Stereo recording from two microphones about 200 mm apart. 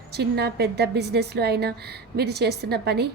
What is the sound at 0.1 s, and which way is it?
A woman's voice, 55° right (ahead or behind).